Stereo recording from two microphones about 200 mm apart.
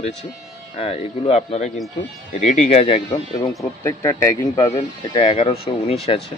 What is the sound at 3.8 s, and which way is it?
Speech, 15° left (ahead or behind).